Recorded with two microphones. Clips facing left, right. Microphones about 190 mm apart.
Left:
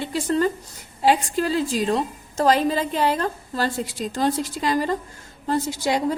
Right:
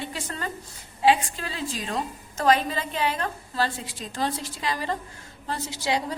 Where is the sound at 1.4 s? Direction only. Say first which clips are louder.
Left 11 dB; 35° left (ahead or behind).